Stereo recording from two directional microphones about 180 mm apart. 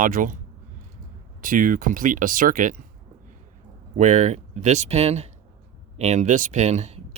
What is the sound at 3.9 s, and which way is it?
Speech, 45° right (ahead or behind).